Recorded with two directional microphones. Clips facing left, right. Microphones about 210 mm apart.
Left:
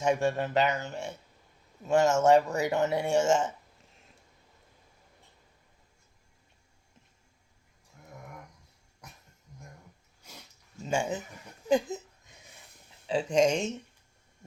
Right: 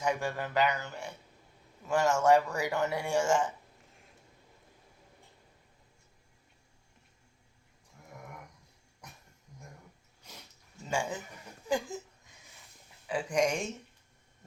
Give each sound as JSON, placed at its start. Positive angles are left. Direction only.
{"t": 0.0, "sound": "speech", "side_deg": 25}
{"t": 10.8, "sound": "speech", "side_deg": 25}
{"t": 13.1, "sound": "speech", "side_deg": 25}